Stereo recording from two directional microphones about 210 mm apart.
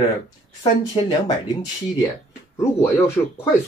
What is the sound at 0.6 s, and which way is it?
Speech, 20° left (ahead or behind).